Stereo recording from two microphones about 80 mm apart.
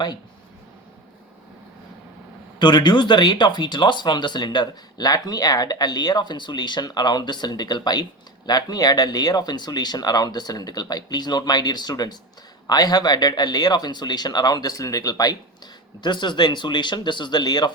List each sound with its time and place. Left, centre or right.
2.6 s speech: left